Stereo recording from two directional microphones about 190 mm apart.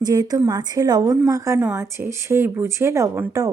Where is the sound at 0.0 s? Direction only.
20° right (ahead or behind).